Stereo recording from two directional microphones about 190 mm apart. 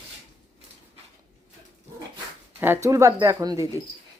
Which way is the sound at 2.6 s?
15° right (ahead or behind).